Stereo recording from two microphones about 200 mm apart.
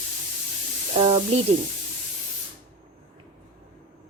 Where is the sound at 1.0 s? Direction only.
30° right (ahead or behind).